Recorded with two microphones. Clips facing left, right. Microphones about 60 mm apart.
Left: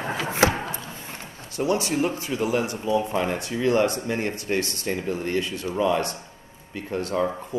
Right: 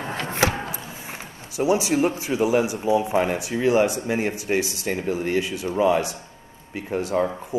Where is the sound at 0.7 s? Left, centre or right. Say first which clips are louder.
Right 1 dB; centre.